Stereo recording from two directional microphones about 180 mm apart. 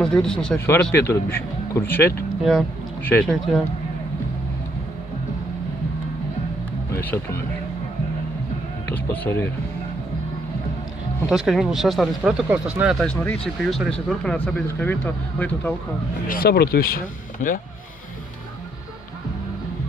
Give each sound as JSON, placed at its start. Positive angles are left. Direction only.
{"t": 0.0, "sound": "speech", "side_deg": 5}
{"t": 6.9, "sound": "speech", "side_deg": 15}
{"t": 8.8, "sound": "speech", "side_deg": 10}
{"t": 11.2, "sound": "speech", "side_deg": 0}
{"t": 13.2, "sound": "speech", "side_deg": 10}
{"t": 16.3, "sound": "speech", "side_deg": 55}